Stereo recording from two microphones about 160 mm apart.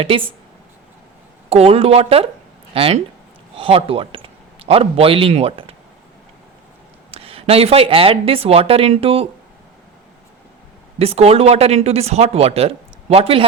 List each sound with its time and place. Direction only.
0.0 s speech: 35° right (ahead or behind)
1.5 s a man's voice: 40° right (ahead or behind)
7.1 s speech: 35° right (ahead or behind)
10.9 s speech: 40° right (ahead or behind)